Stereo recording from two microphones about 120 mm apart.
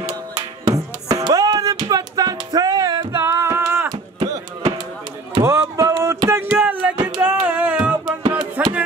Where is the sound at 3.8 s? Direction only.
40° right (ahead or behind).